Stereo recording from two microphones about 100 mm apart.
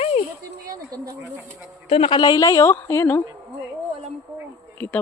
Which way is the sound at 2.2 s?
40° left (ahead or behind).